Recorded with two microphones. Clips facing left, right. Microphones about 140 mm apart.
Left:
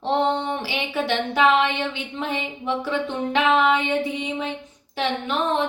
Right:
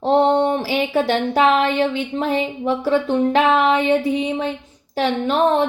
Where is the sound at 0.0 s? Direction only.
40° right (ahead or behind).